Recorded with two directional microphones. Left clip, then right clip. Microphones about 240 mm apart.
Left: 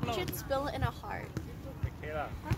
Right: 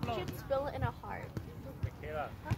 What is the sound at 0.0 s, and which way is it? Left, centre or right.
Speech, left.